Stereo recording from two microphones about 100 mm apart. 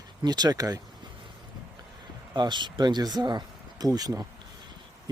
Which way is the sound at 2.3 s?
50° right (ahead or behind).